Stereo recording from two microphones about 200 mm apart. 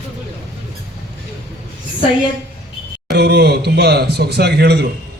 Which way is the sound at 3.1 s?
55° right (ahead or behind).